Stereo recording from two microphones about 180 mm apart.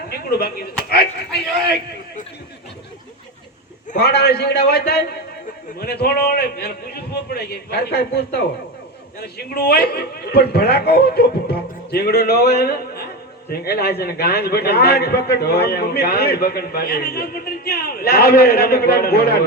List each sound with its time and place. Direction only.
0.1 s a sound: 60° left (ahead or behind)
1.6 s a man's voice: 60° left (ahead or behind)
4.0 s a man's voice: 65° left (ahead or behind)